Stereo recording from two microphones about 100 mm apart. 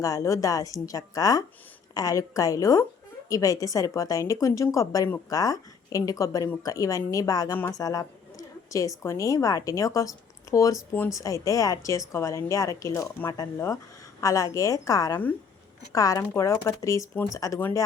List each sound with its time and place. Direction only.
0.0 s a woman's voice: 35° left (ahead or behind)
7.5 s speech: 25° left (ahead or behind)
7.8 s a woman's voice: 40° left (ahead or behind)
16.3 s a woman's voice: 25° left (ahead or behind)